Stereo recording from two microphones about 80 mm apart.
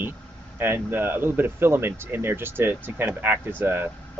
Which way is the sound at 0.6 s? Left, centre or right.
Right.